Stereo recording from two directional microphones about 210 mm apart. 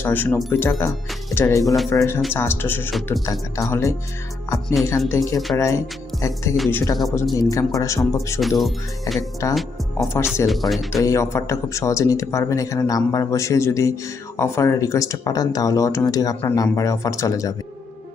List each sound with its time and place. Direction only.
0.0 s speech: 10° left (ahead or behind)
1.6 s speech: centre (ahead or behind)
1.9 s speech: 10° left (ahead or behind)
8.4 s speech: centre (ahead or behind)
9.4 s speech: 15° left (ahead or behind)
10.4 s speech: centre (ahead or behind)
11.0 s speech: 15° left (ahead or behind)